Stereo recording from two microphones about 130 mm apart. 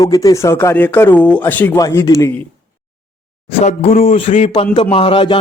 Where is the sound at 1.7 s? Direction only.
25° left (ahead or behind).